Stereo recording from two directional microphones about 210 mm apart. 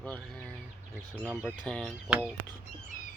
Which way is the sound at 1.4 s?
5° left (ahead or behind).